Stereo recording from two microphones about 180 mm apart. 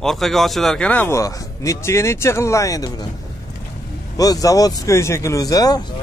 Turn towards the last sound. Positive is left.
turn(degrees=20)  # may be behind; listen again after turning